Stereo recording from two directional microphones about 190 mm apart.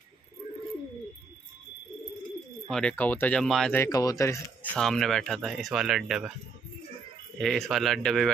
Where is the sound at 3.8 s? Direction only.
20° left (ahead or behind).